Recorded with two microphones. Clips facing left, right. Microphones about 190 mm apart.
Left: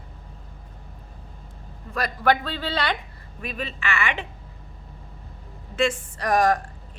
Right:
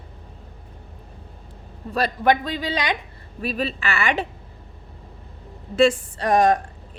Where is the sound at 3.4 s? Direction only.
35° right (ahead or behind).